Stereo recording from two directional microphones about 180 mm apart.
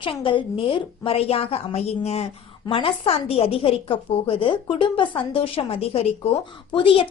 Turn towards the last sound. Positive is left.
turn(degrees=30)  # may be behind; listen again after turning